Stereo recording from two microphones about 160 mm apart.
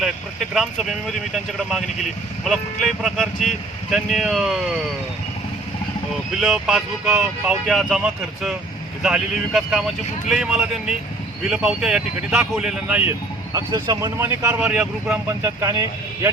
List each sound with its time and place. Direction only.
0.5 s speech: centre (ahead or behind)
2.4 s speech: centre (ahead or behind)
6.4 s speech: centre (ahead or behind)
7.1 s speech: 15° right (ahead or behind)
7.7 s speech: centre (ahead or behind)
13.1 s speech: 20° right (ahead or behind)